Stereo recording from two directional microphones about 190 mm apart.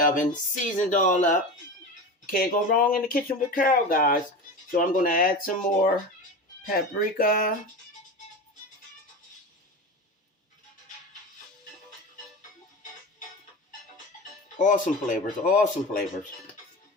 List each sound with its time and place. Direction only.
0.0 s speech: 40° left (ahead or behind)
14.6 s speech: 40° left (ahead or behind)